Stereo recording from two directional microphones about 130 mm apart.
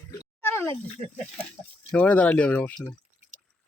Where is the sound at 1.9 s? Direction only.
10° left (ahead or behind).